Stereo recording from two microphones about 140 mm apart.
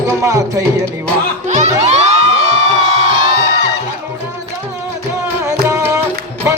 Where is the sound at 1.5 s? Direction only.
55° right (ahead or behind).